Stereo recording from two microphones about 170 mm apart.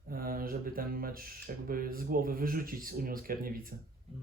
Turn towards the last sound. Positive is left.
turn(degrees=-60)  # may be behind; listen again after turning